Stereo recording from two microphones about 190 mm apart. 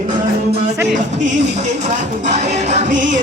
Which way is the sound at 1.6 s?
40° right (ahead or behind).